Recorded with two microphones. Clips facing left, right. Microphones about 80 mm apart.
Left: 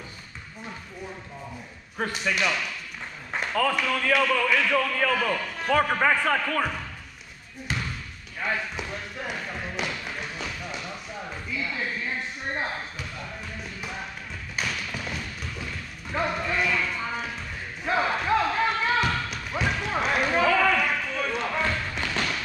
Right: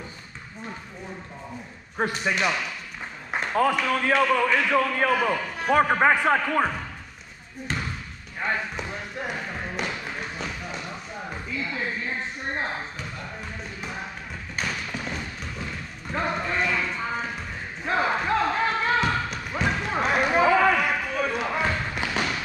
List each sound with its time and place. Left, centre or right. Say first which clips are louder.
2.0 s a man's voice: right 2 dB; right
3.8 s a man's voice: right 2 dB; centre
8.4 s speech: right 1 dB; centre
9.4 s basketball bounce: right 1 dB; centre
11.6 s a sound: right 1 dB; centre
14.6 s thump: right 1 dB; centre
15.1 s music: right 1 dB; centre
16.1 s speech: even; centre
16.3 s clip-clop: even; centre
17.8 s basketball bounce: right 1 dB; centre